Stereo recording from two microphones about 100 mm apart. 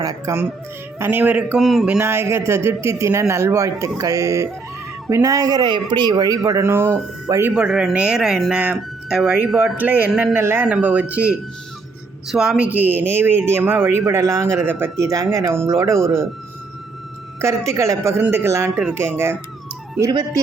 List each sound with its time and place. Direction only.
0.0 s speech: 35° right (ahead or behind)
0.9 s speech: 20° right (ahead or behind)
1.5 s speech: 5° right (ahead or behind)
1.9 s speech: 20° right (ahead or behind)
6.7 s speech: 25° right (ahead or behind)
7.5 s speech: 5° right (ahead or behind); by 16.0 s 30° right (ahead or behind)
17.7 s speech: 30° right (ahead or behind)